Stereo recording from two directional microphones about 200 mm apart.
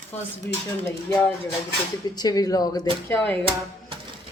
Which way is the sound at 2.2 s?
20° left (ahead or behind).